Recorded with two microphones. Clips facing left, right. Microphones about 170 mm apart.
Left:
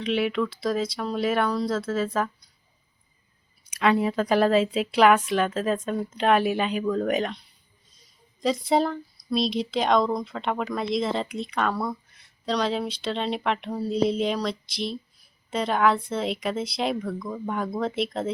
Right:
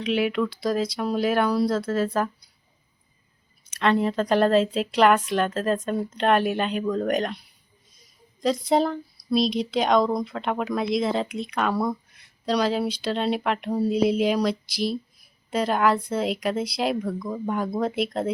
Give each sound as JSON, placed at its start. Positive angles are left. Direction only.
{"t": 0.0, "sound": "a woman's voice", "side_deg": 0}
{"t": 3.8, "sound": "a woman's voice", "side_deg": 5}
{"t": 8.4, "sound": "a woman's voice", "side_deg": 0}